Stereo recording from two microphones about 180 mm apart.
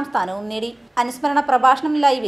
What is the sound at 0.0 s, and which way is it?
A woman's voice, centre (ahead or behind).